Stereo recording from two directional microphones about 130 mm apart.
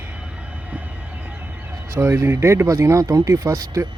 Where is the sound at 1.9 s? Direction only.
20° right (ahead or behind).